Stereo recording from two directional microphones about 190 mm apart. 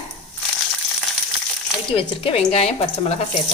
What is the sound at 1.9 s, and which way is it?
A woman's voice, 30° left (ahead or behind).